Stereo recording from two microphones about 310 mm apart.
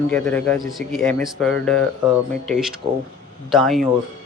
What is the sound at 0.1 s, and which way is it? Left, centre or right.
Speech, centre.